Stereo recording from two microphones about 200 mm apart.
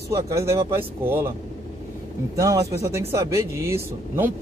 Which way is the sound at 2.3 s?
15° right (ahead or behind).